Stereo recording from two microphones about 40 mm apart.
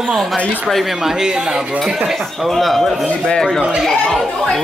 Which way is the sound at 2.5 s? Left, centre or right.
Centre.